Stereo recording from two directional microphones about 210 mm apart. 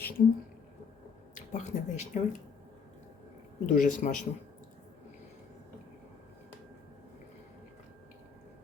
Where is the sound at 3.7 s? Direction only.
35° left (ahead or behind).